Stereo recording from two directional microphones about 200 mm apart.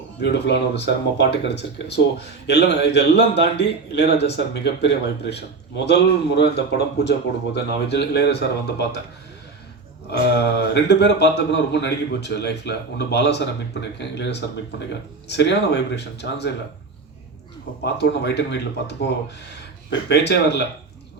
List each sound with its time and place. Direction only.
0.2 s speech: 55° left (ahead or behind)
10.1 s speech: 55° left (ahead or behind)
17.8 s speech: 60° left (ahead or behind)